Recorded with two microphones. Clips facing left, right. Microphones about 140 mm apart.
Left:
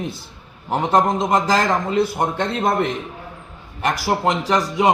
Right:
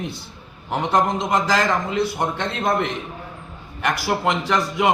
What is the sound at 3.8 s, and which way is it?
Speech, 40° left (ahead or behind).